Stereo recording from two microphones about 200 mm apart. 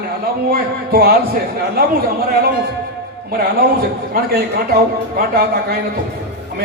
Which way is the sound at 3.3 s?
50° right (ahead or behind).